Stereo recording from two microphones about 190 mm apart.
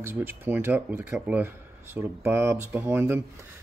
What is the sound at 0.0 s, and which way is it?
Speech, 10° right (ahead or behind).